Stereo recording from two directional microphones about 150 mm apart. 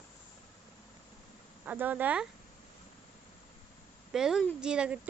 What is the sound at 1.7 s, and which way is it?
Speech, 10° right (ahead or behind).